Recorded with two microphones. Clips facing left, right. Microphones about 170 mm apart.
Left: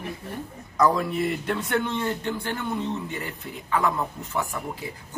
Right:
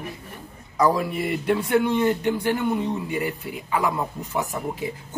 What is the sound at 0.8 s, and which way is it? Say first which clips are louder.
A man's voice: right 1 dB; 5° right (ahead or behind).